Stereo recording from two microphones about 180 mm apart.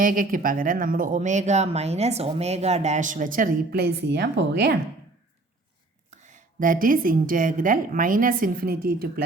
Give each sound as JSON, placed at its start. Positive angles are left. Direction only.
{"t": 0.0, "sound": "speech", "side_deg": -50}
{"t": 6.1, "sound": "speech", "side_deg": -45}